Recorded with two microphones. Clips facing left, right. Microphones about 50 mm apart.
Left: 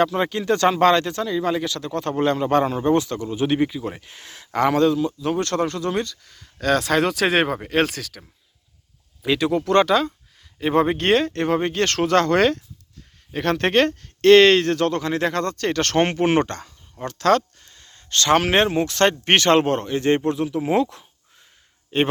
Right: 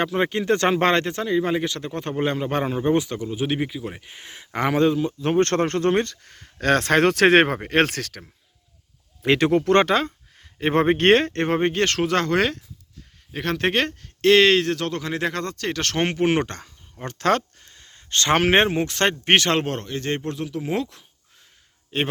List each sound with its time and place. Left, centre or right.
0.0 s speech: right; by 4.0 s centre
4.0 s speech: centre
5.2 s speech: right
9.2 s speech: right
9.6 s speech: right
11.7 s speech: right
17.0 s speech: right; by 22.1 s centre